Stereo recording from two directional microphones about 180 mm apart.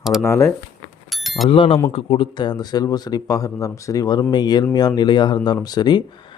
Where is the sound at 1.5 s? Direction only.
30° left (ahead or behind).